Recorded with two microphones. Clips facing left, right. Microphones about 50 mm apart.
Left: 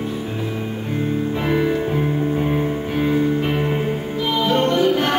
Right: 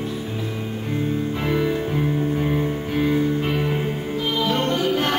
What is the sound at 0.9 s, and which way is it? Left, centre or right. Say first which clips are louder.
Music: left 2 dB; centre.